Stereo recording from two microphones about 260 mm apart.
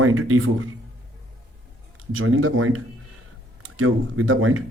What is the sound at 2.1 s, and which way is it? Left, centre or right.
Speech, right.